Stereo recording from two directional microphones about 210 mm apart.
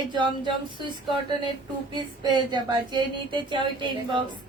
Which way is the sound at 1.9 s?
20° right (ahead or behind).